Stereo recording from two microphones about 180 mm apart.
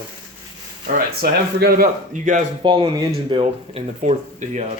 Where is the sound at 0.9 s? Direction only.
60° right (ahead or behind); by 2.5 s 45° right (ahead or behind).